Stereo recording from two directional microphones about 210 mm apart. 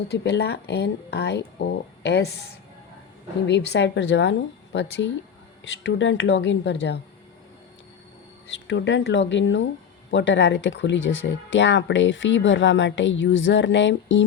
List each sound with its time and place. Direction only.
0.1 s speech: 50° left (ahead or behind)
3.4 s speech: 55° left (ahead or behind)
8.6 s speech: 60° left (ahead or behind)